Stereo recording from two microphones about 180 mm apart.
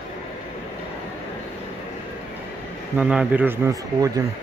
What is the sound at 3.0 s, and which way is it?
Speech, 5° right (ahead or behind).